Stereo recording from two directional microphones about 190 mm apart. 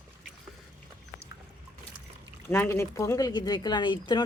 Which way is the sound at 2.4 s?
10° left (ahead or behind).